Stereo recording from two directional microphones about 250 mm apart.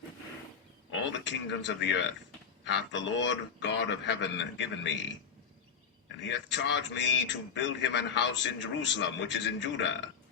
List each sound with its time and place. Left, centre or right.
0.9 s a man's voice: left
6.1 s a man's voice: left